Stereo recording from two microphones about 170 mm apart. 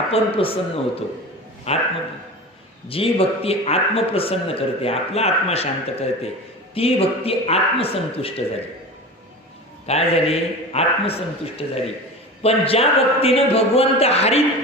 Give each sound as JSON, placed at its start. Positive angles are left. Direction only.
{"t": 0.1, "sound": "a man's voice", "side_deg": 35}
{"t": 2.9, "sound": "a man's voice", "side_deg": 35}
{"t": 9.8, "sound": "a man's voice", "side_deg": 35}